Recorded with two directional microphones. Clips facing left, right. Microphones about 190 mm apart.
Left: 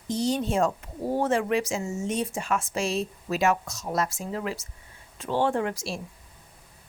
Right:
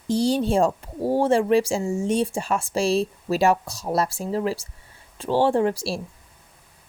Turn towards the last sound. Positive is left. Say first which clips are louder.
# right 6 dB
turn(degrees=-35)  # may be behind; listen again after turning